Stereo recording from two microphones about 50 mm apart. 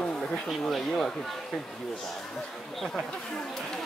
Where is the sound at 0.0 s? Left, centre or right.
Centre.